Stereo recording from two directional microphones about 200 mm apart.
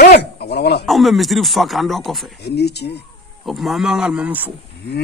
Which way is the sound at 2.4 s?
55° left (ahead or behind).